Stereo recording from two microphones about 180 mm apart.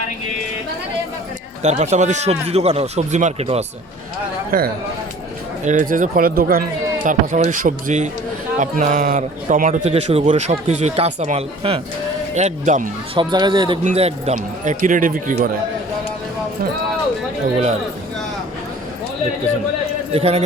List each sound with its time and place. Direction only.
1.6 s a man's voice: 40° right (ahead or behind)
4.5 s a man's voice: 50° right (ahead or behind)
13.1 s speech: 25° right (ahead or behind); by 15.4 s 50° right (ahead or behind)
20.1 s a man's voice: 35° right (ahead or behind)